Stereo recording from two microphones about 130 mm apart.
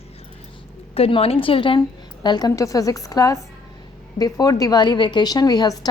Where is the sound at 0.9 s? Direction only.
50° left (ahead or behind).